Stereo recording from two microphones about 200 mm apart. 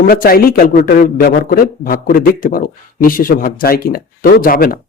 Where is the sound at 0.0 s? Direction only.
45° left (ahead or behind).